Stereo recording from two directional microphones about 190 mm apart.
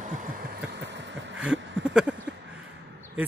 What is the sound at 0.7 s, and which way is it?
Vehicle, 65° right (ahead or behind).